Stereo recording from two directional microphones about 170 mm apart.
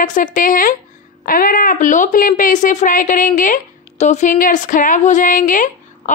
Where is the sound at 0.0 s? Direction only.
50° left (ahead or behind).